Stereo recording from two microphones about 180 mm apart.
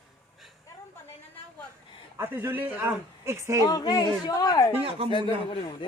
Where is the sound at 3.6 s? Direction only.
20° left (ahead or behind).